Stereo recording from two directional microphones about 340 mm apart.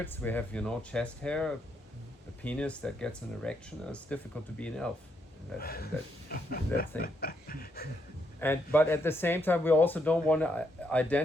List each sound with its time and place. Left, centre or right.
0.0 s speech: centre
5.5 s speech: left
8.4 s speech: centre